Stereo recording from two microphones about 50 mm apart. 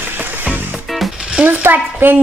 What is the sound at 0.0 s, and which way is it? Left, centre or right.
Music, right.